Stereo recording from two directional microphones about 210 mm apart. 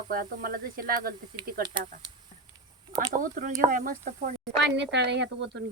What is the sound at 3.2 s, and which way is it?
Speech, 40° right (ahead or behind).